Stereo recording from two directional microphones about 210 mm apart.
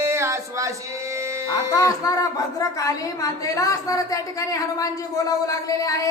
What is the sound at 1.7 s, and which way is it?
A woman's voice, 15° left (ahead or behind).